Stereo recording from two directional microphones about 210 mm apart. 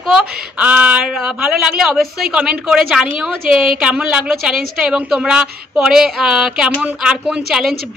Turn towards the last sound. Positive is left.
turn(degrees=-5)  # may be behind; listen again after turning